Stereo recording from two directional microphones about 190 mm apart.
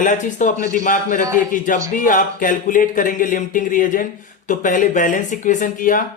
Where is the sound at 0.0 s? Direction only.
40° left (ahead or behind).